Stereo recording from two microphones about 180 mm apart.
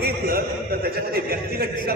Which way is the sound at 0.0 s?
55° right (ahead or behind).